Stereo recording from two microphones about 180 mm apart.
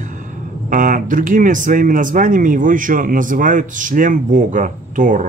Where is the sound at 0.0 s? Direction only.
45° right (ahead or behind).